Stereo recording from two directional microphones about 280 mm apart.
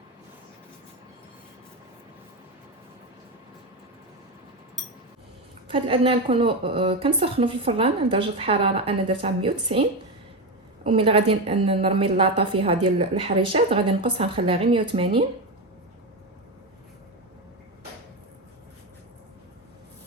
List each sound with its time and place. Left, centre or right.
5.6 s a woman's voice: centre
10.8 s a woman's voice: centre